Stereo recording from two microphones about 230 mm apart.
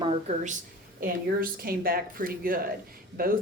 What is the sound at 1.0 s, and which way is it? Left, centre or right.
Speech, right.